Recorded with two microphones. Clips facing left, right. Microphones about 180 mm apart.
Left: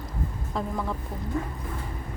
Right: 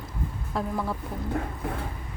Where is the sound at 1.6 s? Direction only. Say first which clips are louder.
Right 4 dB; 65° right (ahead or behind).